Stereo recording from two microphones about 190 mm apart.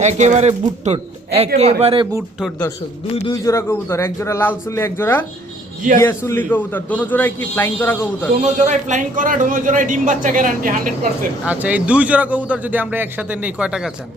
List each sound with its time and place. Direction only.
0.0 s speech: 40° right (ahead or behind)
3.4 s a man's voice: 15° left (ahead or behind)
8.4 s a man's voice: 35° right (ahead or behind)
11.4 s a man's voice: 10° right (ahead or behind)